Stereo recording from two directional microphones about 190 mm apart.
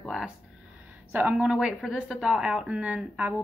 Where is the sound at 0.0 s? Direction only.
Centre (ahead or behind).